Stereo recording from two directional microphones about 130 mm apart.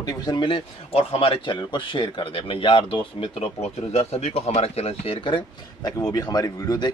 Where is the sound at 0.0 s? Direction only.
30° left (ahead or behind).